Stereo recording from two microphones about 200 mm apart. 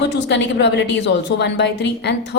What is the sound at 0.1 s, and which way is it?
A woman's voice, 60° left (ahead or behind).